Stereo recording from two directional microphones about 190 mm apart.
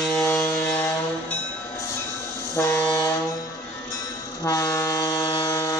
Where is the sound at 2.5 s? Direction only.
15° left (ahead or behind).